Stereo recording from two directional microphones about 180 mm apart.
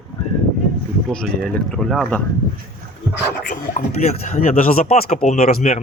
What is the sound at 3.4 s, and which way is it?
Speech, 50° left (ahead or behind).